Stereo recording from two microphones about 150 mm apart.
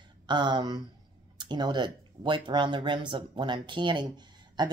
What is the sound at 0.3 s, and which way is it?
Speech, 30° right (ahead or behind).